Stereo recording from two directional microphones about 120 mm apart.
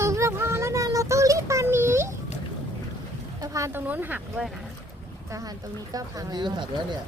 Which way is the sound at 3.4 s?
30° right (ahead or behind).